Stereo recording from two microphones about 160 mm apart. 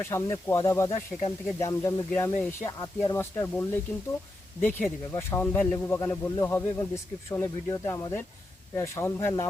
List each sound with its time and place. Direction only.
0.0 s speech: 15° left (ahead or behind)
1.1 s speech: 10° left (ahead or behind)